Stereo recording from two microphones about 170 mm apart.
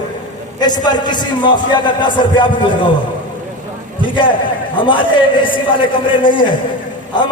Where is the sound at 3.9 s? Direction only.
30° left (ahead or behind).